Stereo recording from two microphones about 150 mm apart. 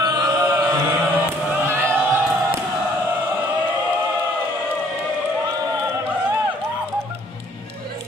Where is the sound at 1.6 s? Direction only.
15° right (ahead or behind).